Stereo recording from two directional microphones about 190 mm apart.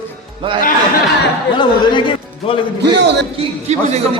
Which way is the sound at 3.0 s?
65° right (ahead or behind).